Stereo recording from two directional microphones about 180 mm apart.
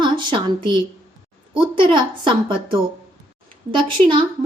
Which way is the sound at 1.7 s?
25° right (ahead or behind).